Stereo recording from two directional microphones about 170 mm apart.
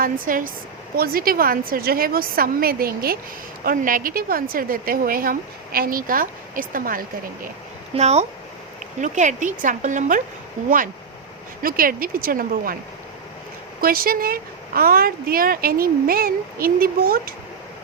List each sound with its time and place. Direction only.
0.0 s a woman's voice: 55° right (ahead or behind)
7.9 s speech: 40° right (ahead or behind)
11.6 s a woman's voice: 55° right (ahead or behind)
13.8 s a woman's voice: 60° right (ahead or behind)